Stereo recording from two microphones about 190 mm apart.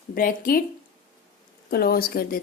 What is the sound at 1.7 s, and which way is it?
Speech, 55° left (ahead or behind).